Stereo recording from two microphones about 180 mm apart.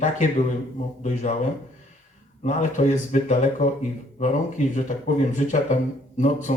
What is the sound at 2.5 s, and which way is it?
Speech, 45° left (ahead or behind).